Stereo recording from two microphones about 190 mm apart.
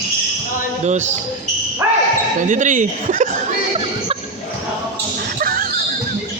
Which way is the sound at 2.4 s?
40° right (ahead or behind).